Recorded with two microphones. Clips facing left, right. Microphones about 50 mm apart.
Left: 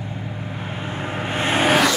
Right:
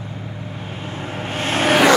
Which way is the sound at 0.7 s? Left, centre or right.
Left.